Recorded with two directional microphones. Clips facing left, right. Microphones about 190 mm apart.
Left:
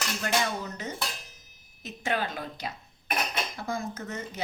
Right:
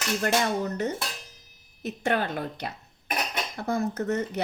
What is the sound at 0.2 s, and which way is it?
Speech, 60° right (ahead or behind).